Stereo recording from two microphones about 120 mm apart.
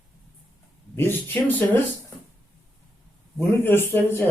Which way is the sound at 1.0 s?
15° left (ahead or behind).